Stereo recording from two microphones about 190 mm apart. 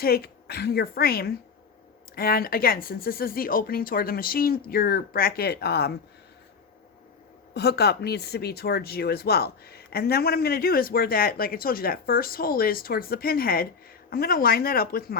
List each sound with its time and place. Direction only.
0.0 s speech: 55° left (ahead or behind)
7.5 s speech: 60° left (ahead or behind)